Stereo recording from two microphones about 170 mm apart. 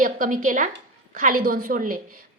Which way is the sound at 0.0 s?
50° right (ahead or behind).